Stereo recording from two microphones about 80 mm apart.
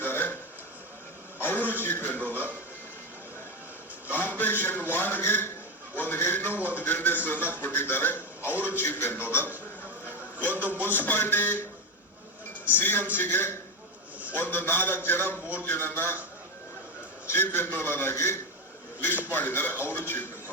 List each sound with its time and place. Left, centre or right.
0.0 s a sound: left
1.4 s a sound: left
4.1 s a man's voice: left
12.6 s a man's voice: left
15.4 s a man's voice: centre
15.6 s a man's voice: left
17.2 s a man's voice: left